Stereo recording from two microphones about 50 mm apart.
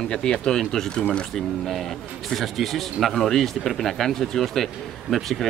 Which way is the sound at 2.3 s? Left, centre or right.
Centre.